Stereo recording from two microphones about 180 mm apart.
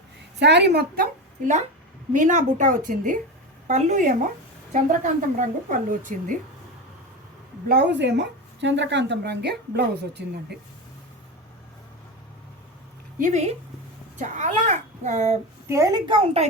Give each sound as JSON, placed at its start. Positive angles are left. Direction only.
{"t": 0.3, "sound": "speech", "side_deg": -70}
{"t": 2.1, "sound": "a woman's voice", "side_deg": -45}
{"t": 7.7, "sound": "speech", "side_deg": -70}
{"t": 13.1, "sound": "a woman's voice", "side_deg": -40}
{"t": 15.6, "sound": "a woman's voice", "side_deg": -15}